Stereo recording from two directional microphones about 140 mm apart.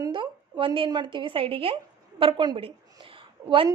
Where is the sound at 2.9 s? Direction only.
35° right (ahead or behind).